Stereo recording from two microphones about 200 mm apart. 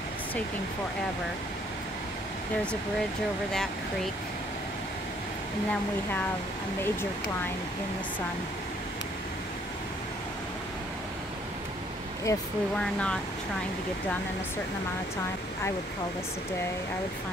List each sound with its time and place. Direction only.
12.3 s speech: 15° left (ahead or behind)
12.7 s speech: 5° left (ahead or behind)